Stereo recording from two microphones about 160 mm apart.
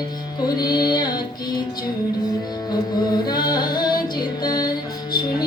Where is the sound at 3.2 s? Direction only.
25° left (ahead or behind).